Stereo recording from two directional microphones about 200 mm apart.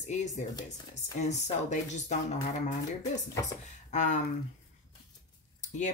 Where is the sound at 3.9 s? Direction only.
35° left (ahead or behind).